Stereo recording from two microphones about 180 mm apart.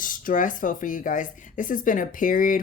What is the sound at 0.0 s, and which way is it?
Speech, 50° left (ahead or behind).